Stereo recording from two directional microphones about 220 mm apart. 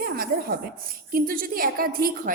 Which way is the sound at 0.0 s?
40° right (ahead or behind).